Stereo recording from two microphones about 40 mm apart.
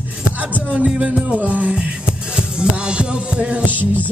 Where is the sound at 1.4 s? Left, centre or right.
Right.